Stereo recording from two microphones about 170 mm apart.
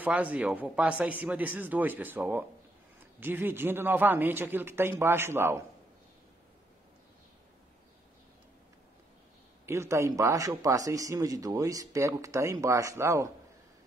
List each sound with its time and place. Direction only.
0.0 s speech: 10° right (ahead or behind)
9.7 s speech: 15° right (ahead or behind)